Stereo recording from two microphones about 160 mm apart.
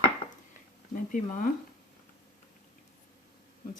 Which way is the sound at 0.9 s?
55° left (ahead or behind).